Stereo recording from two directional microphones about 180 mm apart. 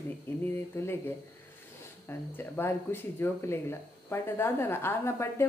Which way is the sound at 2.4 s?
10° left (ahead or behind).